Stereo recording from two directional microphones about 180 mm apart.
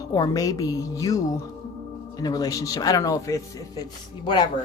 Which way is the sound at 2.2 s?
20° left (ahead or behind).